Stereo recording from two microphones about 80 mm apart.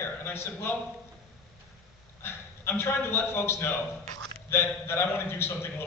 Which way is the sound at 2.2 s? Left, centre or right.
Left.